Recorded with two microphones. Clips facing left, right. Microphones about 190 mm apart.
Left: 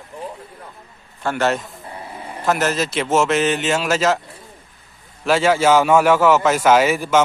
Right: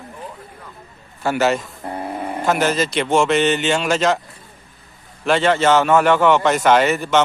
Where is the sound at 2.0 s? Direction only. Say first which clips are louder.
Right 9 dB; 55° right (ahead or behind).